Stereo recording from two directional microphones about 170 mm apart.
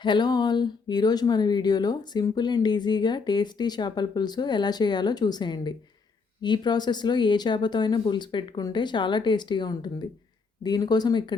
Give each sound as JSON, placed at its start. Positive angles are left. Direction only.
{"t": 0.0, "sound": "speech", "side_deg": 25}